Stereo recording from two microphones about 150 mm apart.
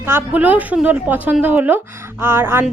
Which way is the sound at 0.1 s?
10° right (ahead or behind).